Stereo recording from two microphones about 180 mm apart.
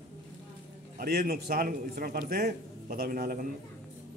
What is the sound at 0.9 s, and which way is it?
A man's voice, 55° right (ahead or behind).